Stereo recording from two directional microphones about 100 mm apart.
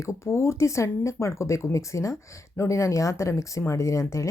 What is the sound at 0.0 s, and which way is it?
Speech, 30° left (ahead or behind).